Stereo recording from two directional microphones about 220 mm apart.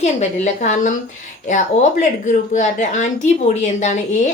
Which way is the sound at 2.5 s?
35° left (ahead or behind).